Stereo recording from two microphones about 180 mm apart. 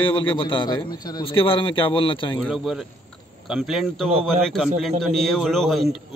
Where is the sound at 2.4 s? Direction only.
Centre (ahead or behind).